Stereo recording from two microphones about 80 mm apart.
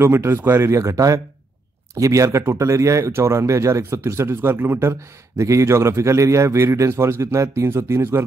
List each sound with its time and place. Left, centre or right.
0.0 s a man's voice: right
0.7 s a man's voice: right